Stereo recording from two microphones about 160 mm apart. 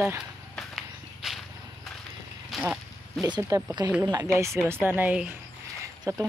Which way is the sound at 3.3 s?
25° right (ahead or behind).